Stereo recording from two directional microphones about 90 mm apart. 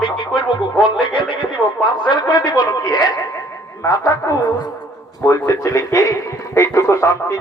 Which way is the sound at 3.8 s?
35° left (ahead or behind).